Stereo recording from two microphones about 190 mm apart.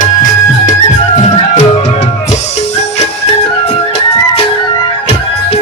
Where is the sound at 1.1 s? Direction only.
40° left (ahead or behind).